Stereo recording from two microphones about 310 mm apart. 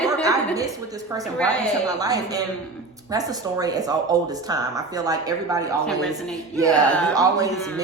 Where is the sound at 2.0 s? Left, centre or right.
Centre.